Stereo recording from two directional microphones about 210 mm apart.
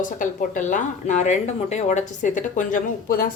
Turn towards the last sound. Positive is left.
turn(degrees=40)  # may be behind; listen again after turning